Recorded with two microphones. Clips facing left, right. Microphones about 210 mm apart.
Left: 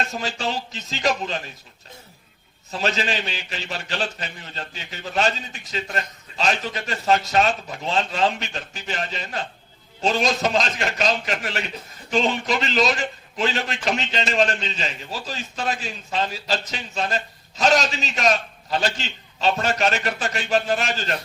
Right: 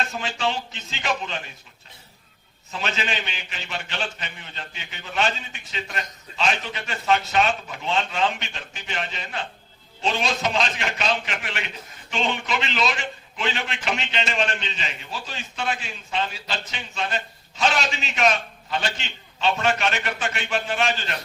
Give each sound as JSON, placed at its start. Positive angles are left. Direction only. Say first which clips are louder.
{"t": 0.1, "sound": "a man's voice", "louder": "even", "side_deg": 40}
{"t": 2.7, "sound": "a man's voice", "louder": "left 4 dB", "side_deg": 35}